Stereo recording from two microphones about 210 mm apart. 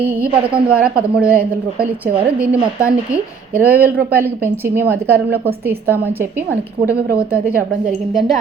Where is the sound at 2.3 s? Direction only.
5° right (ahead or behind).